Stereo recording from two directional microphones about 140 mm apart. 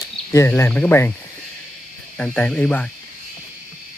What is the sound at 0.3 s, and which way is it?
Speech, 20° left (ahead or behind).